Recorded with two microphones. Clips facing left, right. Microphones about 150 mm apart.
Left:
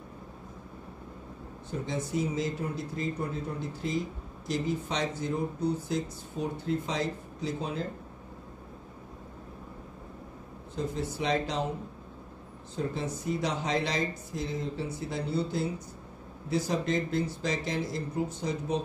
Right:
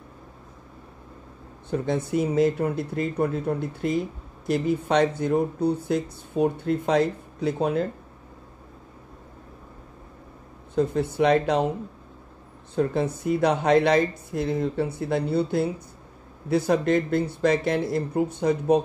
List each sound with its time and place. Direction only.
1.7 s speech: 60° right (ahead or behind)
10.8 s speech: 60° right (ahead or behind)
12.7 s speech: 60° right (ahead or behind)